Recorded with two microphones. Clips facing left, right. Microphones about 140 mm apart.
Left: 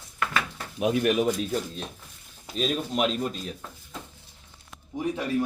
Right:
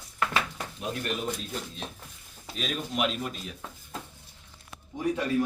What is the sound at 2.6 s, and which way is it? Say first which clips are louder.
Speech: left 4 dB; 40° left (ahead or behind).